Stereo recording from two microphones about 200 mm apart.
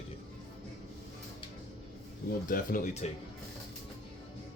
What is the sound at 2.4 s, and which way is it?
Speech, 45° left (ahead or behind).